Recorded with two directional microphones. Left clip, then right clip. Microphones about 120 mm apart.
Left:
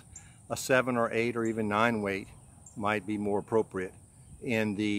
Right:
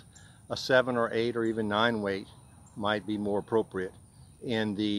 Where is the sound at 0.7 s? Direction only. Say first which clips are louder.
Right 2 dB; 40° left (ahead or behind).